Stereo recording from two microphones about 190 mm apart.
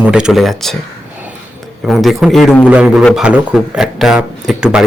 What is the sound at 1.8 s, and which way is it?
A man's voice, centre (ahead or behind).